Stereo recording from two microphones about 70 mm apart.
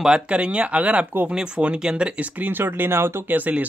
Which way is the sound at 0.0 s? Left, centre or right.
Centre.